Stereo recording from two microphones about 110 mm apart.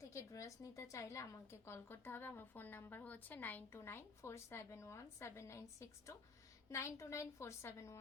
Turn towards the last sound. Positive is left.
turn(degrees=25)  # may be behind; listen again after turning